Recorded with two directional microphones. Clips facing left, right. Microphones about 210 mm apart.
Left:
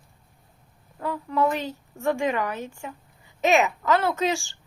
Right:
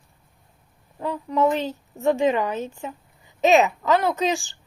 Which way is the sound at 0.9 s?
20° right (ahead or behind).